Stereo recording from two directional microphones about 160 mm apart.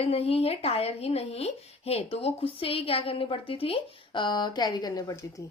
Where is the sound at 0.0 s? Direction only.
40° left (ahead or behind); by 5.2 s 20° left (ahead or behind).